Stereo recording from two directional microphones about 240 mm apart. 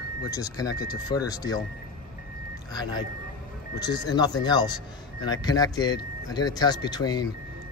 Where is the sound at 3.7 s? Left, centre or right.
Centre.